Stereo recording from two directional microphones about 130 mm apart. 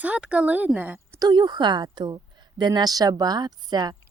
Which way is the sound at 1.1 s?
35° right (ahead or behind).